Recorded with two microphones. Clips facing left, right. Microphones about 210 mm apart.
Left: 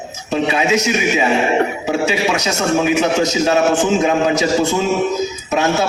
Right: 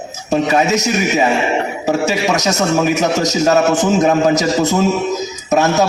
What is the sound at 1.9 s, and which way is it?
A man's voice, 40° right (ahead or behind).